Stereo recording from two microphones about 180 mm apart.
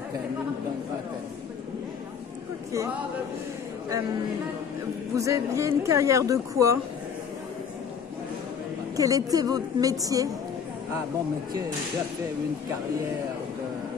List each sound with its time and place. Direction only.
5.1 s a woman's voice: 15° right (ahead or behind)
8.9 s a woman's voice: 20° right (ahead or behind)